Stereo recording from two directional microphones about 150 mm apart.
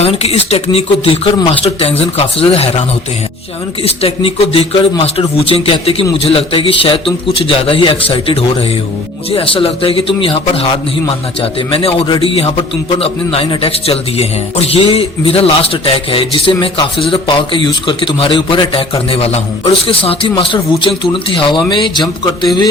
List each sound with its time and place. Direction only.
0.0 s a man's voice: 45° left (ahead or behind)
3.8 s a man's voice: 40° left (ahead or behind)